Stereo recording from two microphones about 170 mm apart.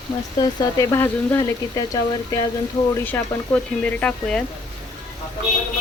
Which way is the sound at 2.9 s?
10° left (ahead or behind).